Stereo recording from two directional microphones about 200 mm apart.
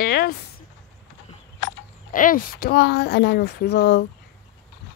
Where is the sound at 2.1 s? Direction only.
45° left (ahead or behind); by 4.0 s 60° left (ahead or behind).